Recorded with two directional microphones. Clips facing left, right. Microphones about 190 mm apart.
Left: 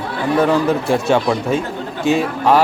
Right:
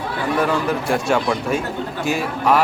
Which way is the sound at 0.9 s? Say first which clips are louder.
Left 2 dB; 25° left (ahead or behind).